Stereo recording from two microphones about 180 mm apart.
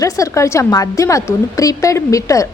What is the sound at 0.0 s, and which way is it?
A woman's voice, 15° left (ahead or behind).